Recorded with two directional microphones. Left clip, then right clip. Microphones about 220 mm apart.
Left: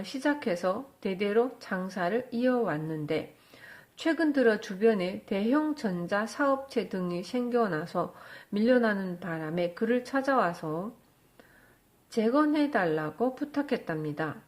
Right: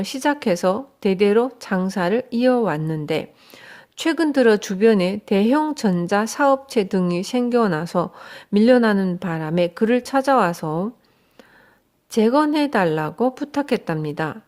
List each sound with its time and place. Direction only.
0.0 s a woman's voice: 50° right (ahead or behind)
12.1 s a woman's voice: 45° right (ahead or behind)